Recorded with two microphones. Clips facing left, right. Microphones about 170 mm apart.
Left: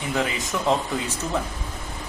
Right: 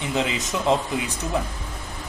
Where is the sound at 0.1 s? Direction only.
20° right (ahead or behind).